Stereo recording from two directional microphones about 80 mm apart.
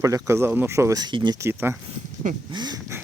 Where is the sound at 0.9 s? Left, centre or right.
Right.